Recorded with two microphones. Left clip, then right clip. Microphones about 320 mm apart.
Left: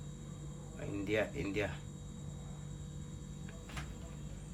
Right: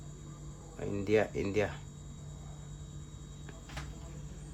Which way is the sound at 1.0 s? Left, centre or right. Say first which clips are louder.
Right 6 dB; right.